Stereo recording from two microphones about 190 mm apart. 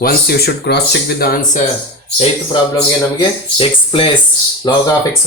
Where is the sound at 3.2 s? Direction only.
25° left (ahead or behind).